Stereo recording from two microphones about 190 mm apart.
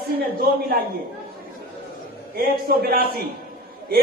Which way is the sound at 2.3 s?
50° right (ahead or behind).